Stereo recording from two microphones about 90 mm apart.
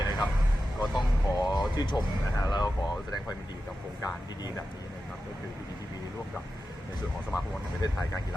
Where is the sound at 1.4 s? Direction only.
55° left (ahead or behind).